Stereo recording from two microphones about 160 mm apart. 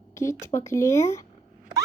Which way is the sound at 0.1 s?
20° left (ahead or behind).